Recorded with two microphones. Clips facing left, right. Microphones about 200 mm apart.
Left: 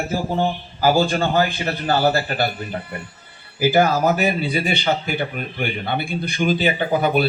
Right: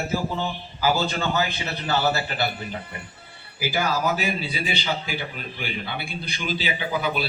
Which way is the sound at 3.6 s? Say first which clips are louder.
Left 8 dB; 55° left (ahead or behind).